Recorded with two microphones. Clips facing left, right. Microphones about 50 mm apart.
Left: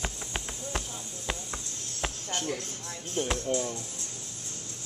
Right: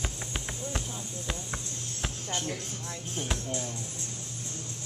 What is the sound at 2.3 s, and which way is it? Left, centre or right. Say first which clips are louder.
Speech: left 1 dB; left.